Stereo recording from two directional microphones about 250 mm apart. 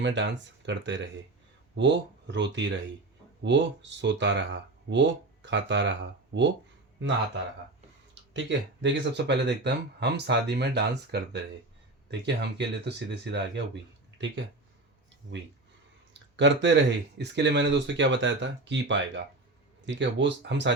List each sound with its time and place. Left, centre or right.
0.0 s speech: right
8.3 s speech: right
16.1 s speech: right